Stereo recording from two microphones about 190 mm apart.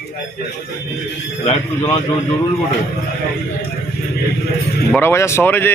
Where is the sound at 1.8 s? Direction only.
20° left (ahead or behind).